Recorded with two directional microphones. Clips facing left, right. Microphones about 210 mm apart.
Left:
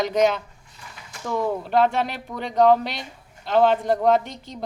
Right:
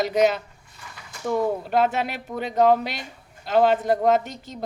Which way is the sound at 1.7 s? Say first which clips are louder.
Left 2 dB; 5° right (ahead or behind).